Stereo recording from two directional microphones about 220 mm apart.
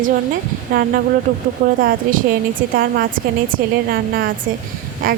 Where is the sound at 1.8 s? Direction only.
40° right (ahead or behind).